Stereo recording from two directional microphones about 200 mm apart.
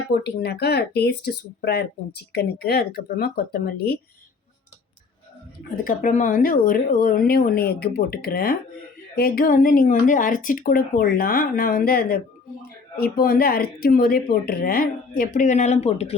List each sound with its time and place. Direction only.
0.1 s speech: 55° left (ahead or behind)
5.7 s speech: 45° left (ahead or behind)